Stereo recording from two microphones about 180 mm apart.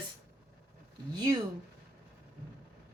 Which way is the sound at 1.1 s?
25° right (ahead or behind).